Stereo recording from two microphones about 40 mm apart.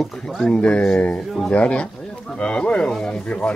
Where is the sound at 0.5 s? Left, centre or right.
Left.